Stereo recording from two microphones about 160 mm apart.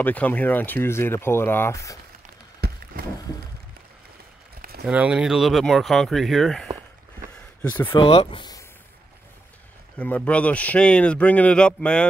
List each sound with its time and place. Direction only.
0.0 s speech: 10° left (ahead or behind)
2.6 s a sound: 80° right
4.8 s speech: 5° right (ahead or behind)
7.9 s speech: 35° left (ahead or behind)
9.9 s speech: 10° left (ahead or behind)